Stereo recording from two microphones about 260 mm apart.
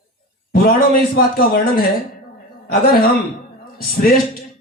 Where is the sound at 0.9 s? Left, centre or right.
Left.